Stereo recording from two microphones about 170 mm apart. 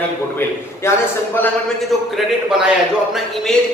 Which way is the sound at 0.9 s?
15° left (ahead or behind).